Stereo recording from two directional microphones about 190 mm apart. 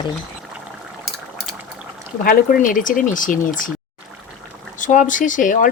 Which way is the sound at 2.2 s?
45° left (ahead or behind).